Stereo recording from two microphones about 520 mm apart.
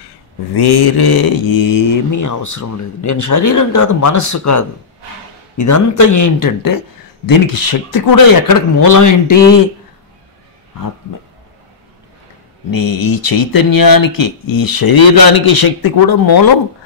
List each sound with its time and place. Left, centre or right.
0.6 s speech: left
12.7 s speech: left